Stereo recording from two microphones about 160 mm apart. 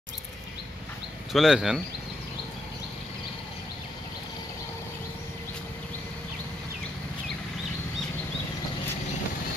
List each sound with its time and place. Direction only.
1.3 s speech: centre (ahead or behind)